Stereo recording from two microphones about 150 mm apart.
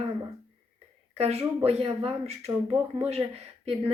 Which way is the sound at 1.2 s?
45° right (ahead or behind).